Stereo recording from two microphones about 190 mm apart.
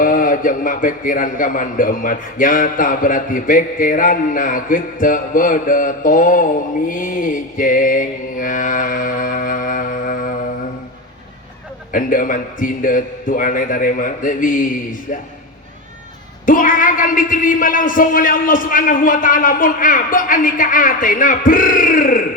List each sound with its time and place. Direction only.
0.0 s a man's voice: 45° left (ahead or behind)
11.9 s a man's voice: 45° left (ahead or behind)
16.5 s a man's voice: 45° left (ahead or behind)